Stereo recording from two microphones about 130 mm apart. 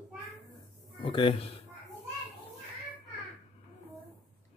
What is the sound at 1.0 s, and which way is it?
Speech, 45° left (ahead or behind).